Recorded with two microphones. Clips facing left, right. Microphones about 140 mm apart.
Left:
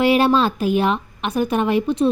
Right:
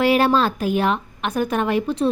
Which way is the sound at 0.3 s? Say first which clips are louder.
Left 1 dB; 5° left (ahead or behind).